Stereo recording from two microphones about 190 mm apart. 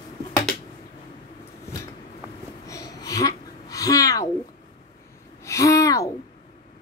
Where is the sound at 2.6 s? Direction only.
20° left (ahead or behind).